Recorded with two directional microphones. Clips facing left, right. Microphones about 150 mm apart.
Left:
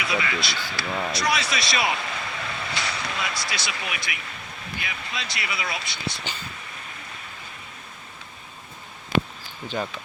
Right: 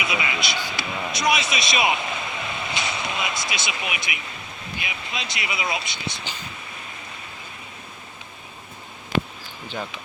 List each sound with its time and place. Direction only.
0.0 s speech: 20° right (ahead or behind)